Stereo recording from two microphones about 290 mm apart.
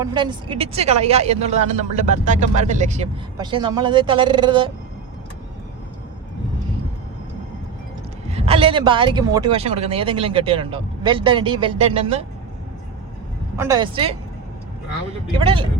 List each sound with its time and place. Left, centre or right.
0.0 s speech: centre
8.3 s speech: right
13.6 s speech: centre
15.4 s speech: centre